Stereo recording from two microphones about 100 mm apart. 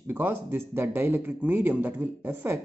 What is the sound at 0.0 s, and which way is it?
Speech, 20° right (ahead or behind).